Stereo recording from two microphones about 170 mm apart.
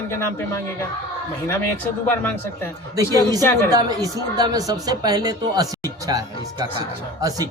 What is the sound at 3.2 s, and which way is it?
A woman's voice, 20° right (ahead or behind).